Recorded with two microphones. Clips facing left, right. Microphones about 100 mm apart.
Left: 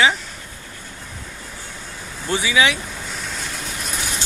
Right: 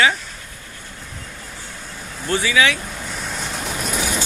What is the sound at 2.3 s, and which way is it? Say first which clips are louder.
Speech: right 1 dB; 15° left (ahead or behind).